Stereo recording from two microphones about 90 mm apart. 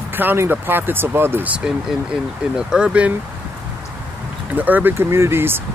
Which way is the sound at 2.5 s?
10° right (ahead or behind).